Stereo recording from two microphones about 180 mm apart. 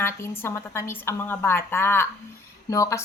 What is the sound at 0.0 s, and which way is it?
A woman's voice, 15° left (ahead or behind).